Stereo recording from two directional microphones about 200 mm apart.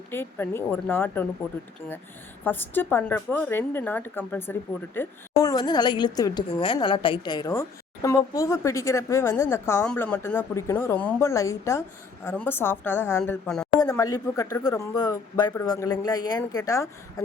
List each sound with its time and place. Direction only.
0.1 s a woman's voice: 10° left (ahead or behind)
2.4 s a woman's voice: 10° left (ahead or behind)
13.7 s speech: 20° left (ahead or behind)